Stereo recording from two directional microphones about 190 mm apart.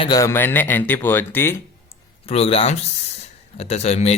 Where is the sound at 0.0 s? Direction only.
20° left (ahead or behind).